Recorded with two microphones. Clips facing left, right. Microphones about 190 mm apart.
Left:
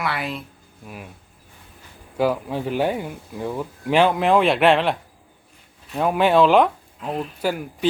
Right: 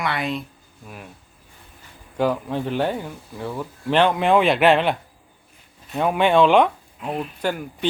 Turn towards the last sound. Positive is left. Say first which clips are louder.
# left 1 dB
turn(degrees=5)  # may be behind; listen again after turning